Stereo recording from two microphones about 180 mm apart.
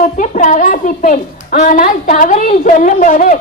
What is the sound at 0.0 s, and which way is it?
A woman's voice, 45° left (ahead or behind).